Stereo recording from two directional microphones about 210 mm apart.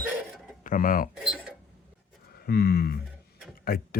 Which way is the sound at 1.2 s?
5° right (ahead or behind).